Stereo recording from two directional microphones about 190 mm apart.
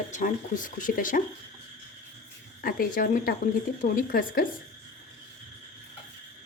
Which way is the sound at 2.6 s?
50° left (ahead or behind).